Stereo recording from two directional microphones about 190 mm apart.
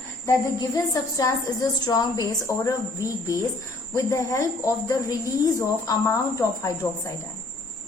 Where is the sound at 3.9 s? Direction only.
15° left (ahead or behind).